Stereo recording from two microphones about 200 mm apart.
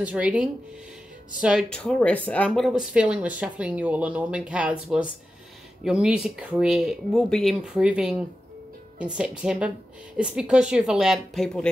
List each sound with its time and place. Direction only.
0.0 s speech: 5° right (ahead or behind)